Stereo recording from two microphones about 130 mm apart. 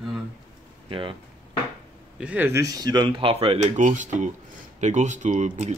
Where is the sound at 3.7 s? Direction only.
70° right (ahead or behind).